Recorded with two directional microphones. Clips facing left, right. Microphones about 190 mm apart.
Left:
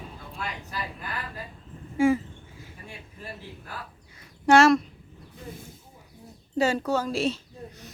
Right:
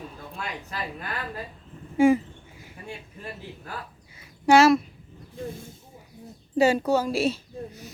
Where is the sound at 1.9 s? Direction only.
20° right (ahead or behind).